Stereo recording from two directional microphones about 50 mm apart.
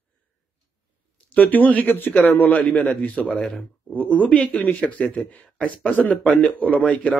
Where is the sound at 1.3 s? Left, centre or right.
Left.